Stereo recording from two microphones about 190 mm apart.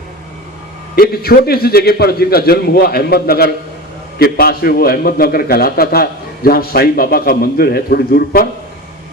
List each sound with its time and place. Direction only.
0.9 s a man's voice: 50° left (ahead or behind)